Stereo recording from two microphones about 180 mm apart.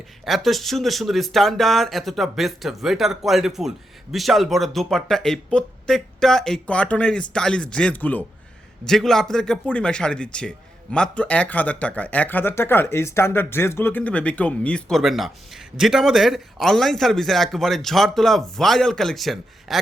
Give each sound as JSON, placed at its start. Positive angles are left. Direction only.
{"t": 0.3, "sound": "speech", "side_deg": 0}